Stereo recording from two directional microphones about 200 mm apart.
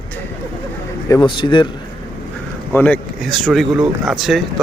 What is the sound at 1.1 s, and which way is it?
Speech, 20° left (ahead or behind).